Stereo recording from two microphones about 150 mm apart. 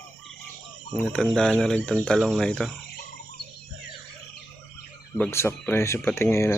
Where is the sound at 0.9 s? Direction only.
5° left (ahead or behind).